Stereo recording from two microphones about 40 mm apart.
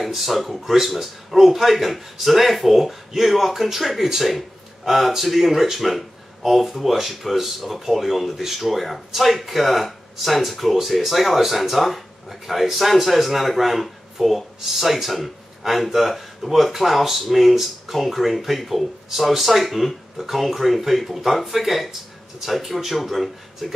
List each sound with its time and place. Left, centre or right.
0.0 s speech: centre